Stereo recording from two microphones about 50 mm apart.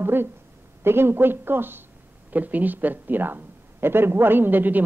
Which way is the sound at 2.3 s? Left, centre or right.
Right.